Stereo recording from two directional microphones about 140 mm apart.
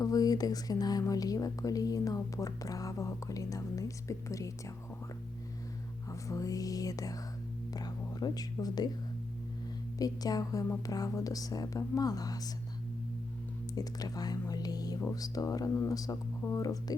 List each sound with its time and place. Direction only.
0.0 s speech: 25° left (ahead or behind)
6.1 s speech: 25° left (ahead or behind)
10.0 s speech: 25° left (ahead or behind)
13.7 s speech: 25° left (ahead or behind)